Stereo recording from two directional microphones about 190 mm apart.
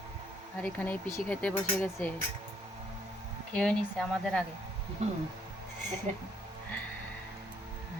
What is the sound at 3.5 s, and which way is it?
Speech, 5° left (ahead or behind).